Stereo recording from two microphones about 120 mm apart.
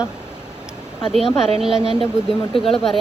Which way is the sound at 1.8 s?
50° right (ahead or behind).